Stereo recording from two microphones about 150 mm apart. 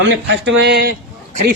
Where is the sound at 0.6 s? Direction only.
90° right.